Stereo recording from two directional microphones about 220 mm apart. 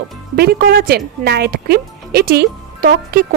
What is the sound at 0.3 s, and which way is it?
Speech, 45° right (ahead or behind).